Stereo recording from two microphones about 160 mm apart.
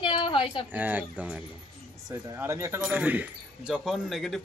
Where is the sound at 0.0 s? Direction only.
30° left (ahead or behind).